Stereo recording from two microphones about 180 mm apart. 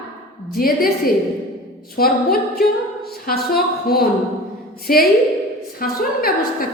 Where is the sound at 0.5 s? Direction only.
55° left (ahead or behind).